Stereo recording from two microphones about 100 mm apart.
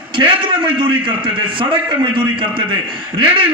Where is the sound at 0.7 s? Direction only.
55° right (ahead or behind).